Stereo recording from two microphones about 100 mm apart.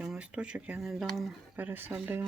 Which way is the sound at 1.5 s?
20° right (ahead or behind).